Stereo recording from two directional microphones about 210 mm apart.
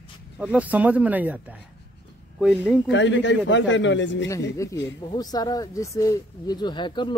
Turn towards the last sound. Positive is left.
turn(degrees=20)  # may be behind; listen again after turning